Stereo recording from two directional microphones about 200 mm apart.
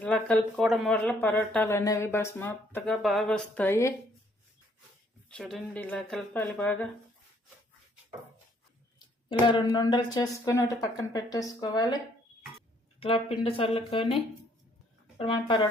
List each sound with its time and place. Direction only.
0.0 s speech: 5° left (ahead or behind)
5.3 s speech: centre (ahead or behind)
9.5 s speech: 20° left (ahead or behind)
13.0 s speech: 25° left (ahead or behind)
15.2 s speech: 25° left (ahead or behind)